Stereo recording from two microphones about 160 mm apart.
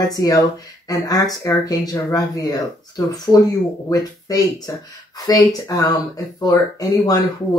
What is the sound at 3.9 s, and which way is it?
Speech, 20° left (ahead or behind).